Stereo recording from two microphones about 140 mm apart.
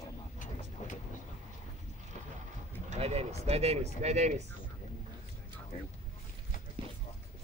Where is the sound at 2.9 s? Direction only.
50° right (ahead or behind).